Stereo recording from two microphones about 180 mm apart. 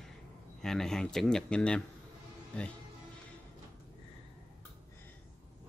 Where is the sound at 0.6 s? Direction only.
5° left (ahead or behind).